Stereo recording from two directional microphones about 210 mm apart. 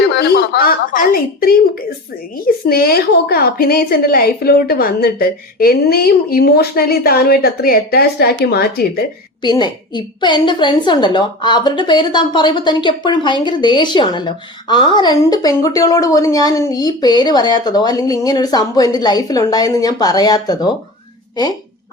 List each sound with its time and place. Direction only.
0.1 s a woman's voice: 50° left (ahead or behind)
2.6 s a woman's voice: 45° left (ahead or behind)
9.4 s a woman's voice: 20° left (ahead or behind)